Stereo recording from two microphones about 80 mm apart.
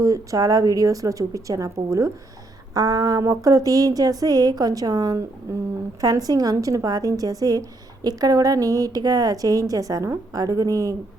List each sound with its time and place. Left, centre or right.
0.0 s a woman's voice: right